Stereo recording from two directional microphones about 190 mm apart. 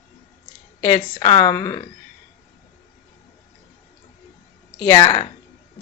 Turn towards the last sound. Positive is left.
turn(degrees=20)  # may be behind; listen again after turning